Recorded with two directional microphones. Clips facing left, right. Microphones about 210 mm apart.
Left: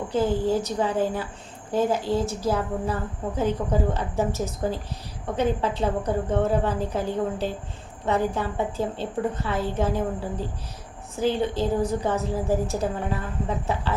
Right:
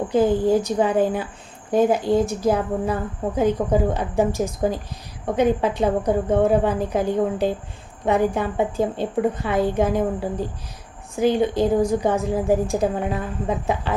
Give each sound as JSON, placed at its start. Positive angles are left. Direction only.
{"t": 0.1, "sound": "a woman's voice", "side_deg": -15}